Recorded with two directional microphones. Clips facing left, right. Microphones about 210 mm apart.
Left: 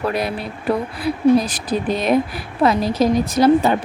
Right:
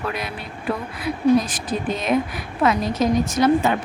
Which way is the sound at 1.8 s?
35° left (ahead or behind).